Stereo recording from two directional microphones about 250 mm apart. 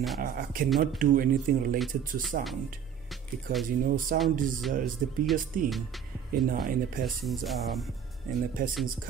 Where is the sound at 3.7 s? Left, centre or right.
Right.